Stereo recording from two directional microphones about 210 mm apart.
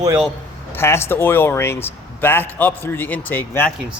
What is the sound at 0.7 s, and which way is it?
Speech, 10° left (ahead or behind).